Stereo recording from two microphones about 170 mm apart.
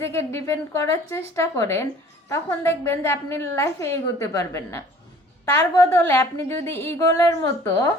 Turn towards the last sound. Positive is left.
turn(degrees=15)  # may be behind; listen again after turning